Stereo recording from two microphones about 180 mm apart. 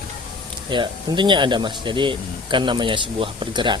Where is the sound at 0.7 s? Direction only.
25° right (ahead or behind).